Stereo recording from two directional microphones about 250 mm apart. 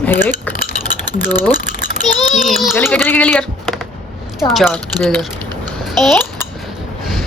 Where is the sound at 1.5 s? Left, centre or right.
Left.